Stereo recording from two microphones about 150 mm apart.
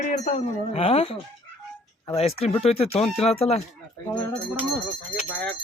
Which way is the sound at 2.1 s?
40° left (ahead or behind).